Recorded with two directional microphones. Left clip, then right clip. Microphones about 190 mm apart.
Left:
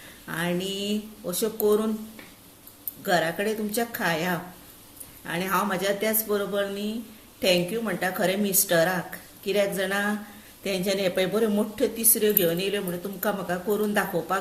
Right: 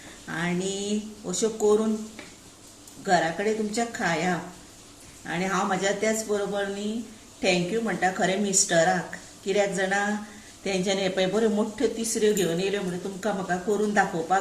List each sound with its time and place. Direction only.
0.3 s speech: 45° left (ahead or behind)
3.1 s speech: 50° left (ahead or behind)